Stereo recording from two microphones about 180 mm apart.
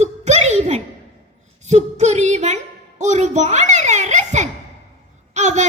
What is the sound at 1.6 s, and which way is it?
Female singing, 40° right (ahead or behind).